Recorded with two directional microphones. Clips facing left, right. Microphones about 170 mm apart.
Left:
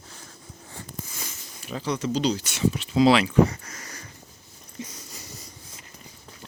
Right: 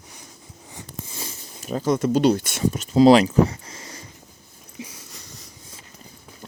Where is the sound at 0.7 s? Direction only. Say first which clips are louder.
Right 2 dB; 25° right (ahead or behind).